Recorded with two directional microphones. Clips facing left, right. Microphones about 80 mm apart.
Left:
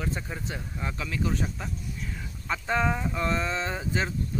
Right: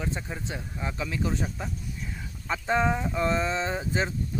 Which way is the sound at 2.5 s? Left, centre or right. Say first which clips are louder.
Right 2 dB; centre.